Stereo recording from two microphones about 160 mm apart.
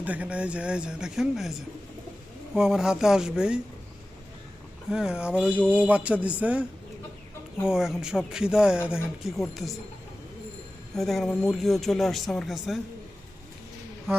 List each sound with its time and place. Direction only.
0.0 s speech: 10° right (ahead or behind)
2.6 s speech: 5° right (ahead or behind)
4.9 s a man's voice: 5° right (ahead or behind)
10.9 s speech: centre (ahead or behind)